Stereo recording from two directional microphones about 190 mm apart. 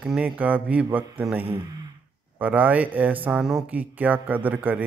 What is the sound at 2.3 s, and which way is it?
Speech, 10° right (ahead or behind).